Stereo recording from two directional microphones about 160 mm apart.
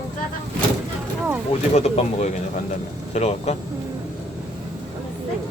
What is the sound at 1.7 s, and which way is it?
Speech, 40° left (ahead or behind).